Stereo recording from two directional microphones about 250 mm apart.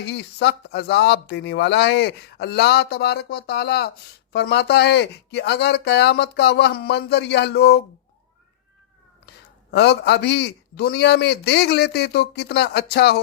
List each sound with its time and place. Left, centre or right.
0.0 s speech: left
9.7 s speech: left